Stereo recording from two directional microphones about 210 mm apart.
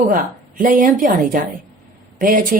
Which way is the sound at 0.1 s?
40° right (ahead or behind).